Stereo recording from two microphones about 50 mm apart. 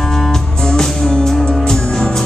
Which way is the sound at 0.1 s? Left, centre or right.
Centre.